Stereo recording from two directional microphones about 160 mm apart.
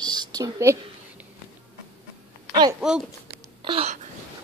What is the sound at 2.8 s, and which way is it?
Speech, 5° right (ahead or behind).